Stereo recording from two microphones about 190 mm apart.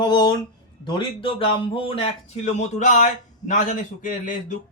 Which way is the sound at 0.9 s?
25° left (ahead or behind).